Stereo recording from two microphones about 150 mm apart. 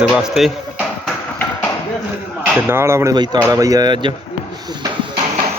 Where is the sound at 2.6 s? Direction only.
15° right (ahead or behind).